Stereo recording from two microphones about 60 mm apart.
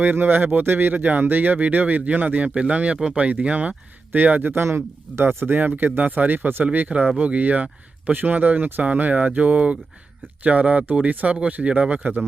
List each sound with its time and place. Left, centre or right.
0.0 s speech: right
4.6 s speech: right